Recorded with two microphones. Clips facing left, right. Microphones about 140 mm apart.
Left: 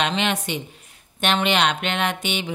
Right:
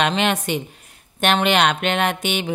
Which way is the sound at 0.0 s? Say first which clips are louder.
Right 3 dB; 50° right (ahead or behind).